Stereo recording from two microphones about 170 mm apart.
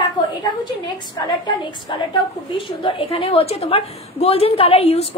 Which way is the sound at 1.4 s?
30° left (ahead or behind).